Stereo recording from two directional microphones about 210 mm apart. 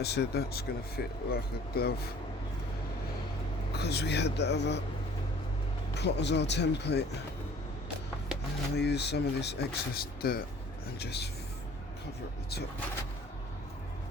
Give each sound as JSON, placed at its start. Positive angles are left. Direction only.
{"t": 0.0, "sound": "speech", "side_deg": 50}
{"t": 3.7, "sound": "speech", "side_deg": 50}
{"t": 5.9, "sound": "speech", "side_deg": 55}
{"t": 8.7, "sound": "speech", "side_deg": 50}